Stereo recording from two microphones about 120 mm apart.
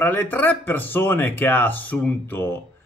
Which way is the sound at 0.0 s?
15° left (ahead or behind).